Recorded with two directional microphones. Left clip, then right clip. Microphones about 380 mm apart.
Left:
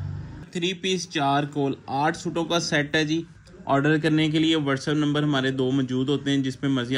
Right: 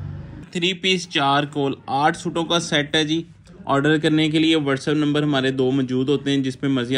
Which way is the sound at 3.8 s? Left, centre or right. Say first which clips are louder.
Right 6 dB; right.